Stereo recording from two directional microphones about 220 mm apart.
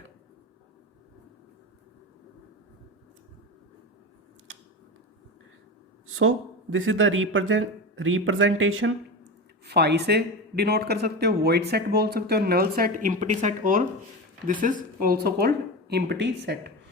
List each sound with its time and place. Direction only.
6.1 s speech: 65° right (ahead or behind)
9.6 s speech: 50° right (ahead or behind)